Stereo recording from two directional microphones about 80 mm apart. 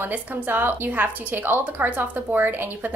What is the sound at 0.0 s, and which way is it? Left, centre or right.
A woman's voice, right.